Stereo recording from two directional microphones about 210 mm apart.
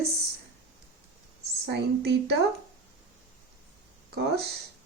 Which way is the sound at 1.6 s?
50° right (ahead or behind).